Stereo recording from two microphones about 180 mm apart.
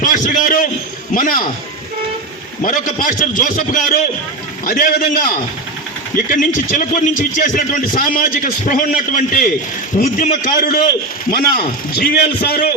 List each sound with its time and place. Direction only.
0.0 s speech: 45° left (ahead or behind)
2.6 s speech: 50° left (ahead or behind)
6.3 s speech: 50° left (ahead or behind)
11.3 s a man's voice: 60° left (ahead or behind)